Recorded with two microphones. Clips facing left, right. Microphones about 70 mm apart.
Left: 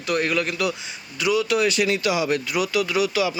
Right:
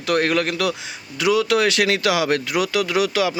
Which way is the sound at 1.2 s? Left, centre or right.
Right.